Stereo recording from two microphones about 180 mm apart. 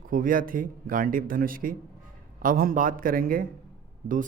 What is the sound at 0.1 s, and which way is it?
Speech, 50° right (ahead or behind).